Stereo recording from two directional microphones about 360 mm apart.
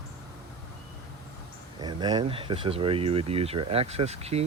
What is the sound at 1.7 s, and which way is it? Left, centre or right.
Speech, centre.